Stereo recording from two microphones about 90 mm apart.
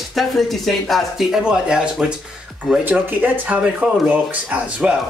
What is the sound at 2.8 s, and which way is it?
Speech, 20° right (ahead or behind).